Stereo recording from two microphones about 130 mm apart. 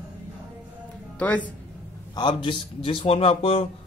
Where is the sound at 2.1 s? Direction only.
35° left (ahead or behind).